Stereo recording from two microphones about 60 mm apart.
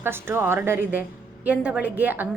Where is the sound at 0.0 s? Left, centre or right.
Right.